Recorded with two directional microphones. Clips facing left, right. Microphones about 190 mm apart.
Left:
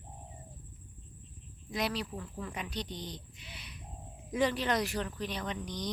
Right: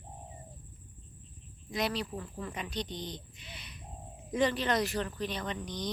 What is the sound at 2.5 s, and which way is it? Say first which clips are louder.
Speech: right 3 dB; 10° left (ahead or behind).